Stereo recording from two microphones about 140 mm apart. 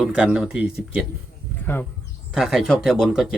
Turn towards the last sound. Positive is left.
turn(degrees=-5)  # may be behind; listen again after turning